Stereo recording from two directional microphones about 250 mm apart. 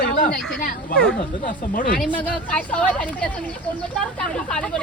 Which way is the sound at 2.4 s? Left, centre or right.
Centre.